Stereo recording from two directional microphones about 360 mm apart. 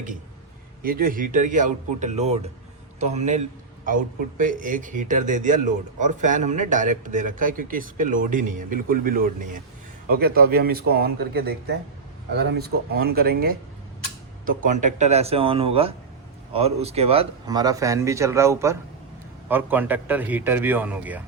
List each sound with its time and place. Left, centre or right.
0.8 s a man's voice: right; by 21.2 s centre